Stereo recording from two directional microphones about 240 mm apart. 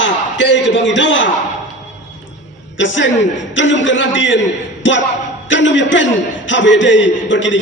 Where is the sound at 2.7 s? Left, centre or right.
Left.